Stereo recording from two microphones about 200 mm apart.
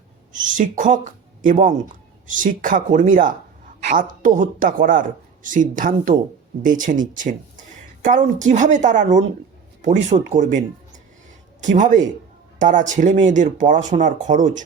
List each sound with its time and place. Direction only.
0.4 s speech: 40° right (ahead or behind)
11.6 s speech: 40° right (ahead or behind)